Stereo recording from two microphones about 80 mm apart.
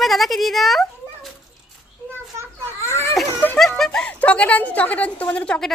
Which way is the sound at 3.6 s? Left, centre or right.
Centre.